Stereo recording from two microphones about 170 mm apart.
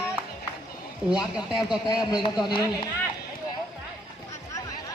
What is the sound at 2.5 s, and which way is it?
Speech, 20° left (ahead or behind).